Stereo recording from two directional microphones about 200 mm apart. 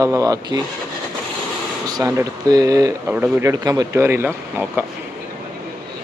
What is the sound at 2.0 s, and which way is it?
Speech, 15° right (ahead or behind).